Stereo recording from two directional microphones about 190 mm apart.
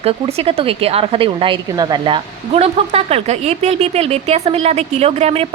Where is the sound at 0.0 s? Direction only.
35° right (ahead or behind).